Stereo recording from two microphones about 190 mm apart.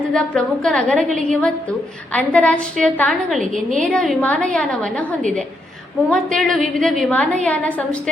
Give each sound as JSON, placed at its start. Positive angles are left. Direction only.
{"t": 0.1, "sound": "a woman's voice", "side_deg": 5}
{"t": 3.5, "sound": "a woman's voice", "side_deg": -40}
{"t": 3.8, "sound": "a woman's voice", "side_deg": 5}
{"t": 6.1, "sound": "a woman's voice", "side_deg": 5}